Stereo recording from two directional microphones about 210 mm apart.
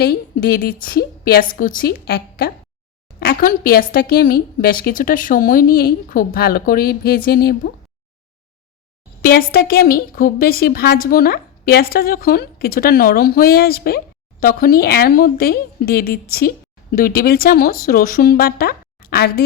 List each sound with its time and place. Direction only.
0.0 s a woman's voice: 45° left (ahead or behind)
9.2 s a woman's voice: 45° left (ahead or behind)